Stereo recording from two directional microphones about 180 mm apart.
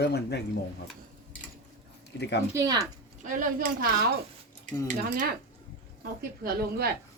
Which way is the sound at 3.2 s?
45° right (ahead or behind).